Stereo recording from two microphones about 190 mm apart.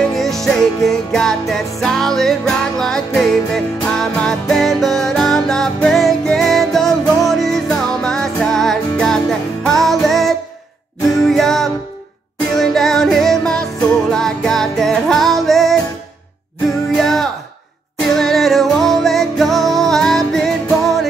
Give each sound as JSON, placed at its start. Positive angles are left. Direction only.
{"t": 0.0, "sound": "music", "side_deg": 0}
{"t": 16.9, "sound": "music", "side_deg": 0}